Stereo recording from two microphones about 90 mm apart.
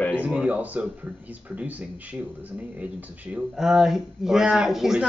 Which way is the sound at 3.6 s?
5° right (ahead or behind).